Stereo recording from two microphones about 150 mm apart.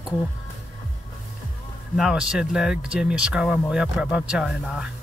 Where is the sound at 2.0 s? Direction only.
5° right (ahead or behind).